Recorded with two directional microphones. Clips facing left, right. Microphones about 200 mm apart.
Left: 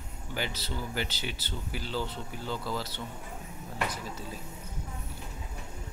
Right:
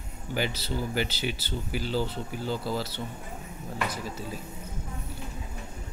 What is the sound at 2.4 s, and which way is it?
Speech, 35° right (ahead or behind).